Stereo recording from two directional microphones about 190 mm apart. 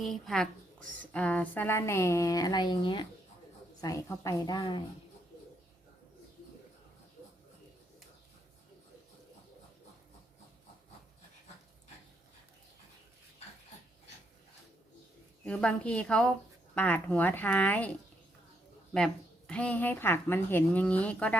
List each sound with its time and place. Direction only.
0.0 s a woman's voice: centre (ahead or behind); by 4.8 s 20° left (ahead or behind)
15.4 s a woman's voice: 5° left (ahead or behind)
18.9 s speech: 5° left (ahead or behind)